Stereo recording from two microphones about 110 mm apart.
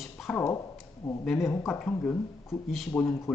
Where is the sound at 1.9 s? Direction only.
20° left (ahead or behind).